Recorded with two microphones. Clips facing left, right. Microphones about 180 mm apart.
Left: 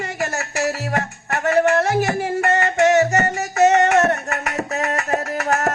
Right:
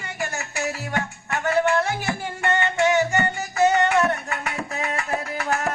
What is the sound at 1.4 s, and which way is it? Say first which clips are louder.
Music: left 4 dB; 40° left (ahead or behind).